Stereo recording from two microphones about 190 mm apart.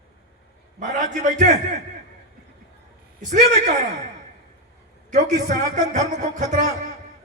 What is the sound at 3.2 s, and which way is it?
Speech, 40° right (ahead or behind).